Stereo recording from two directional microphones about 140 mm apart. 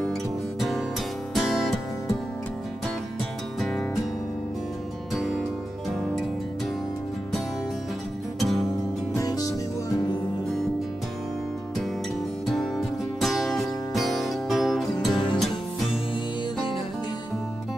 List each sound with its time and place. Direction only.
0.6 s music: centre (ahead or behind)
5.1 s music: centre (ahead or behind)
9.1 s music: 25° left (ahead or behind)
12.4 s music: centre (ahead or behind)